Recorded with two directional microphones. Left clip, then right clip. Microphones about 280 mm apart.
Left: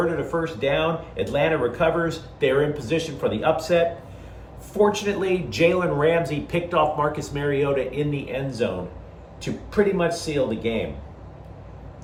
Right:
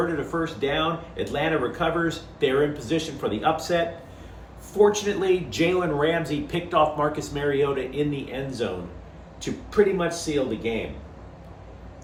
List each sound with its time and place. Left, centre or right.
0.4 s speech: centre